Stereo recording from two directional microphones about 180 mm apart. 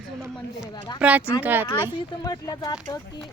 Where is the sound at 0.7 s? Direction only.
20° left (ahead or behind).